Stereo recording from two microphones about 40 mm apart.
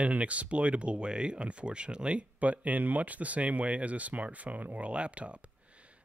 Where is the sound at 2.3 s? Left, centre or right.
Right.